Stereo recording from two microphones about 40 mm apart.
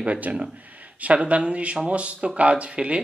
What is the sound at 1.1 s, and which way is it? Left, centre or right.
Speech, right.